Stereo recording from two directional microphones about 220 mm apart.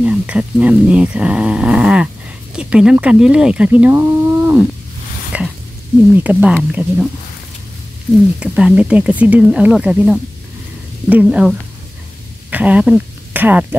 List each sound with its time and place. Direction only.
0.0 s speech: 5° right (ahead or behind)
5.3 s a sound: 5° right (ahead or behind)
6.1 s speech: 5° right (ahead or behind)
8.4 s speech: 5° right (ahead or behind)